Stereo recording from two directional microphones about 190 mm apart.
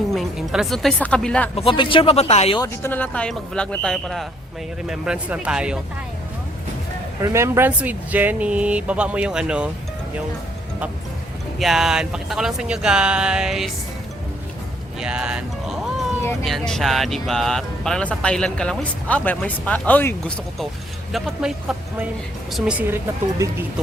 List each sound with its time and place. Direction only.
0.1 s speech: centre (ahead or behind)
1.5 s speech: 25° left (ahead or behind)
2.6 s speech: 10° left (ahead or behind); by 5.8 s 5° right (ahead or behind)
7.2 s speech: 15° right (ahead or behind)
11.6 s speech: centre (ahead or behind)
15.0 s speech: 5° right (ahead or behind)